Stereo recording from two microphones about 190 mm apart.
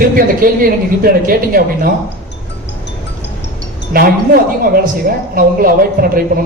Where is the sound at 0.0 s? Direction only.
50° right (ahead or behind).